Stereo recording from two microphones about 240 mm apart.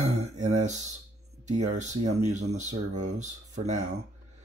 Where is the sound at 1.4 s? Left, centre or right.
Right.